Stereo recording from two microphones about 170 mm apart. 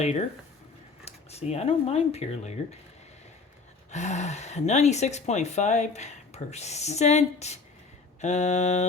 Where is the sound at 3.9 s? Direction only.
45° left (ahead or behind).